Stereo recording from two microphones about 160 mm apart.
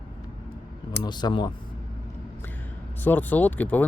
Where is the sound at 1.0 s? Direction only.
25° left (ahead or behind).